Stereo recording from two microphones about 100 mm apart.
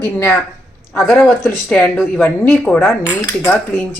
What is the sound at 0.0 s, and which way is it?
Speech, 25° left (ahead or behind).